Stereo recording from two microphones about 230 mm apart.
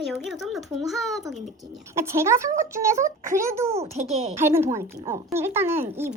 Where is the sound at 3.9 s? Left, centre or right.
Right.